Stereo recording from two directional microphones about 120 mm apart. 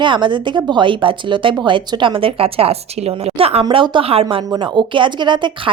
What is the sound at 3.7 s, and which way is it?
A woman's voice, 45° right (ahead or behind).